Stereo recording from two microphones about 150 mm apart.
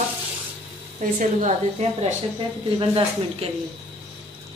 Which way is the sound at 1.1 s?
50° right (ahead or behind).